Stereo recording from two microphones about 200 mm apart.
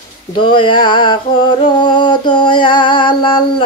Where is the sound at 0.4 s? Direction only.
25° left (ahead or behind).